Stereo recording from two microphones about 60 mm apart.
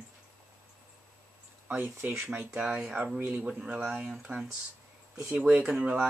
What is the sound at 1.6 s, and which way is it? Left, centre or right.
Speech, right.